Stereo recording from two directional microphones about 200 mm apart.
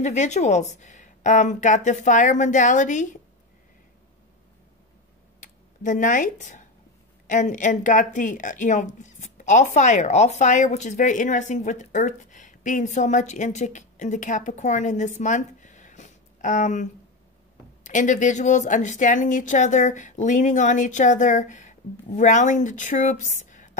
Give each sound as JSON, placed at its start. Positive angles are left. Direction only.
{"t": 0.0, "sound": "speech", "side_deg": 35}
{"t": 5.4, "sound": "a sound", "side_deg": 40}
{"t": 7.2, "sound": "speech", "side_deg": 40}